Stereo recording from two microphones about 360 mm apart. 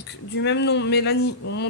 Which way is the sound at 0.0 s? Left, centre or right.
Left.